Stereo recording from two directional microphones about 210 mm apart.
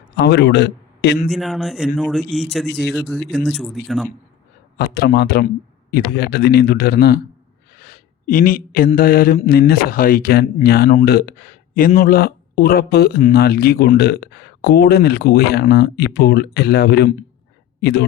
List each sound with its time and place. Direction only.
0.2 s a man's voice: 55° left (ahead or behind)
1.3 s speech: centre (ahead or behind)
4.8 s speech: 50° left (ahead or behind)
7.8 s a sound: 45° left (ahead or behind)
9.0 s speech: 45° left (ahead or behind)